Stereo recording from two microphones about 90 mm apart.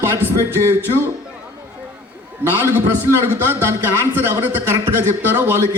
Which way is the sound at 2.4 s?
25° right (ahead or behind).